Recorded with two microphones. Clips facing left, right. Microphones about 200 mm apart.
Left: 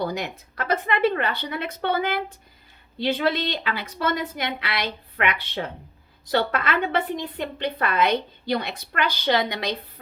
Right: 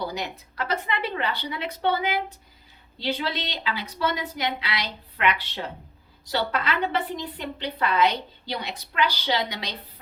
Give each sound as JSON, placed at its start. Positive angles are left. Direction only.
{"t": 0.0, "sound": "a woman's voice", "side_deg": 50}